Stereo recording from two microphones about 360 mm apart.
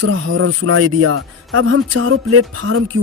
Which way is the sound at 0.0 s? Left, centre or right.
Right.